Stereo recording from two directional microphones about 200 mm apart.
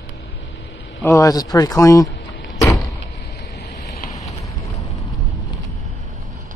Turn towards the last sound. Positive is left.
turn(degrees=15)  # may be behind; listen again after turning